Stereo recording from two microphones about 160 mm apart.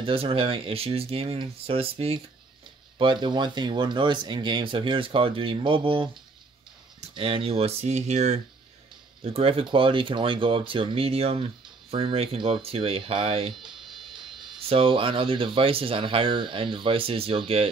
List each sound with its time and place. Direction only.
0.0 s speech: 35° right (ahead or behind)
13.6 s music: centre (ahead or behind)
14.7 s speech: 35° right (ahead or behind)